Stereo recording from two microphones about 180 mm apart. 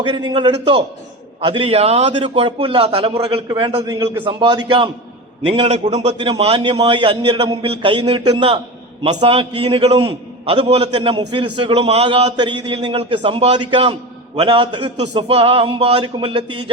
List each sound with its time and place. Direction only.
0.0 s a man's voice: 25° right (ahead or behind)
3.8 s a man's voice: 20° right (ahead or behind); by 12.3 s 35° right (ahead or behind)
12.4 s a man's voice: 25° right (ahead or behind)